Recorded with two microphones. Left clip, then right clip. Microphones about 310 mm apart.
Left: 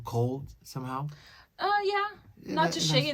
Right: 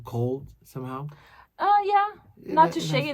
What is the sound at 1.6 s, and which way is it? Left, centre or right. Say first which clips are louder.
A woman's voice: right 7 dB; centre.